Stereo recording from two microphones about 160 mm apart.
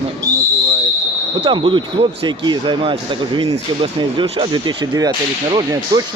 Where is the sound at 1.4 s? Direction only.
30° right (ahead or behind).